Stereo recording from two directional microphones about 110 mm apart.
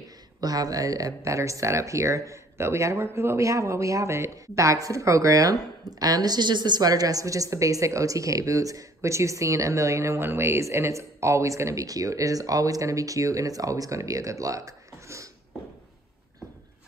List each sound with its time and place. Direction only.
0.4 s speech: 35° right (ahead or behind)